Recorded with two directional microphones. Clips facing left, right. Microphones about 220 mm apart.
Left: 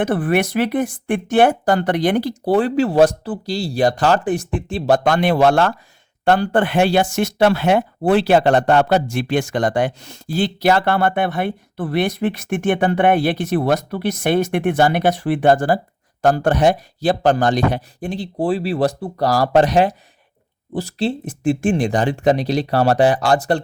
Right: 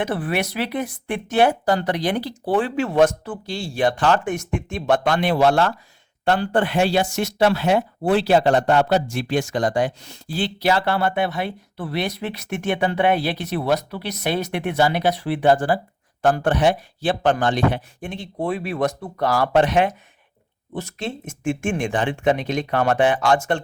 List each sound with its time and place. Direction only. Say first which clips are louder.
0.0 s speech: left 6 dB; 50° left (ahead or behind)